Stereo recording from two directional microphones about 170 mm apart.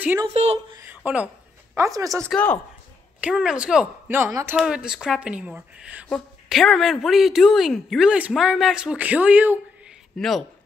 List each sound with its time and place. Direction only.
0.3 s speech: 40° right (ahead or behind)
0.7 s a sound: 10° right (ahead or behind)
1.8 s speech: 20° right (ahead or behind)
2.2 s speech: 10° left (ahead or behind)
3.2 s a woman's voice: 5° right (ahead or behind)
4.6 s a woman's voice: 5° right (ahead or behind)
6.0 s a woman's voice: centre (ahead or behind)
10.1 s a woman's voice: centre (ahead or behind)